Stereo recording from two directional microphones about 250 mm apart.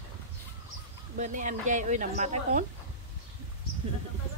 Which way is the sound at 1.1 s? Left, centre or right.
Right.